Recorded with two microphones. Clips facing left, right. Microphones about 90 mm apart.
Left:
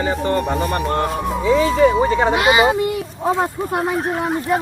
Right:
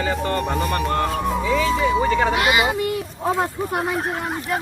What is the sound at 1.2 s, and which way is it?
Speech, centre (ahead or behind).